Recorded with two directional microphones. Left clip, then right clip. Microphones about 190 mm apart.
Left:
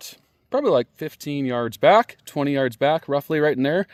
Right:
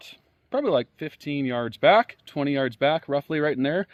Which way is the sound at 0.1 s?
60° left (ahead or behind).